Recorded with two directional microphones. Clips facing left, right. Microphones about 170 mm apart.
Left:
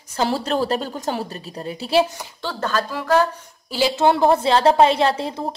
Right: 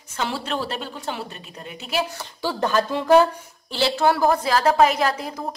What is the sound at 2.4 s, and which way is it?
Speech, 15° right (ahead or behind).